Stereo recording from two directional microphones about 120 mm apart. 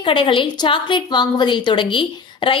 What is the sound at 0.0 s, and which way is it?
A woman's voice, 45° left (ahead or behind).